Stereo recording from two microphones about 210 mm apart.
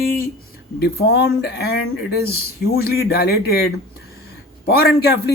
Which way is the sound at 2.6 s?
50° left (ahead or behind).